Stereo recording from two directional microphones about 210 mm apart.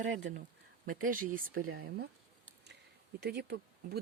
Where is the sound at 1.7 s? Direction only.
60° right (ahead or behind).